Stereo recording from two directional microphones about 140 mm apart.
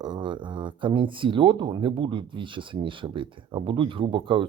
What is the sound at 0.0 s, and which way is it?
Speech, 35° right (ahead or behind).